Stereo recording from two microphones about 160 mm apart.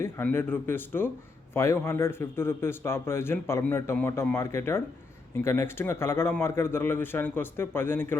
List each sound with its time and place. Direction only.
0.0 s a man's voice: 15° left (ahead or behind)